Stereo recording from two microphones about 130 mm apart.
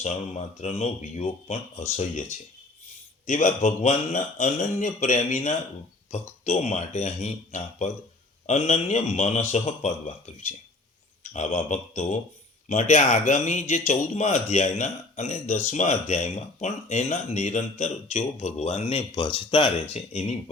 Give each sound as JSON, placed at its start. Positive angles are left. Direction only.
{"t": 0.0, "sound": "a man's voice", "side_deg": 65}